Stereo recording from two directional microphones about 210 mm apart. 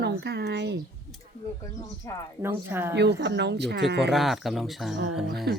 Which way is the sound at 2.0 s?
15° left (ahead or behind).